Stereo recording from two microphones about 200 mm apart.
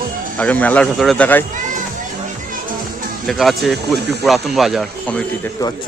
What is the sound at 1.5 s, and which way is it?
Music, 40° right (ahead or behind).